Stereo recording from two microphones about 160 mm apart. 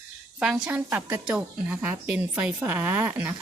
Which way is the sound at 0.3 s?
5° right (ahead or behind).